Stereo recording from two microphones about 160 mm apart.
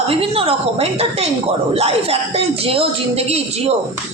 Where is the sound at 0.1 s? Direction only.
35° right (ahead or behind).